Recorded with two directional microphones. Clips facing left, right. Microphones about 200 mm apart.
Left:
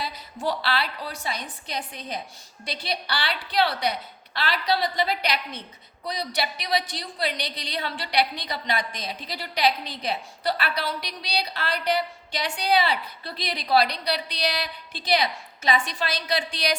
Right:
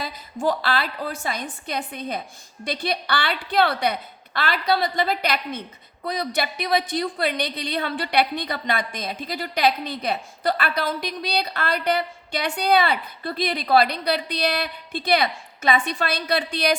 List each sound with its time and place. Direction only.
0.0 s a woman's voice: 45° right (ahead or behind)